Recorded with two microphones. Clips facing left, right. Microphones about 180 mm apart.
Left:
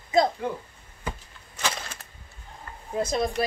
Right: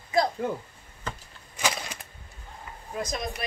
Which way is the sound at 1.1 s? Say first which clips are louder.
Left 2 dB; 10° left (ahead or behind).